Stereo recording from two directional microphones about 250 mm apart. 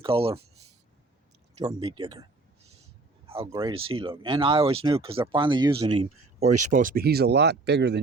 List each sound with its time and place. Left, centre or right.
0.0 s speech: right
1.6 s speech: centre
3.2 s a sound: right
3.5 s speech: centre; by 7.9 s right